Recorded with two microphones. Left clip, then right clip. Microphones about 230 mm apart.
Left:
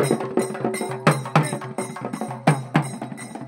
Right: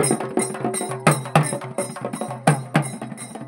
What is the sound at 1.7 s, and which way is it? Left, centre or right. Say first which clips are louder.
Music: right 2 dB; right.